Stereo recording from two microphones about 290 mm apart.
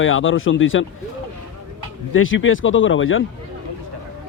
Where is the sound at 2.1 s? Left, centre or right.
Left.